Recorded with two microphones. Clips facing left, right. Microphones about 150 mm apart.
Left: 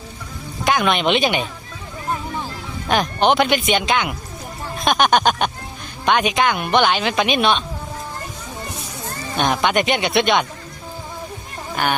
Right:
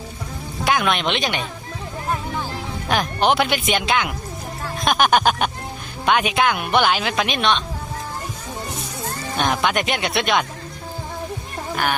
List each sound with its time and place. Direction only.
0.6 s speech: centre (ahead or behind)
2.9 s speech: centre (ahead or behind)
9.4 s speech: centre (ahead or behind)